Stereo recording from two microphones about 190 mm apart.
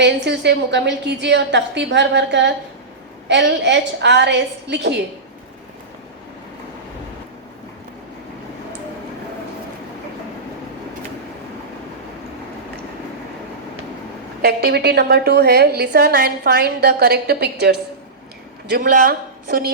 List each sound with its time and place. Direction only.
0.0 s a woman's voice: 65° right (ahead or behind)
14.4 s a woman's voice: 55° right (ahead or behind)
18.7 s speech: 50° right (ahead or behind)